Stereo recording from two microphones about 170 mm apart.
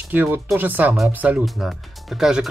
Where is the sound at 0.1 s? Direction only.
10° right (ahead or behind).